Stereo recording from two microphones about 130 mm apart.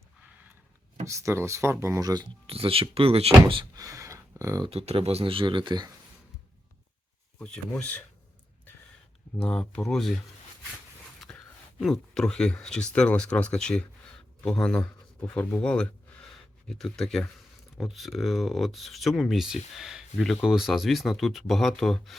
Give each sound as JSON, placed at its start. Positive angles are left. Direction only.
{"t": 1.0, "sound": "speech", "side_deg": -20}
{"t": 2.5, "sound": "speech", "side_deg": -45}
{"t": 3.8, "sound": "a sound", "side_deg": -25}
{"t": 4.7, "sound": "speech", "side_deg": -50}
{"t": 7.3, "sound": "speech", "side_deg": 10}
{"t": 9.4, "sound": "speech", "side_deg": 10}